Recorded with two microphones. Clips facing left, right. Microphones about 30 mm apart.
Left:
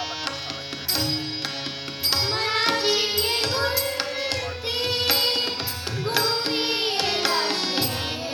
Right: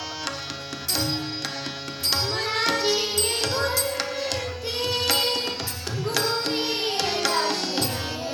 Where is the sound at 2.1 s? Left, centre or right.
Left.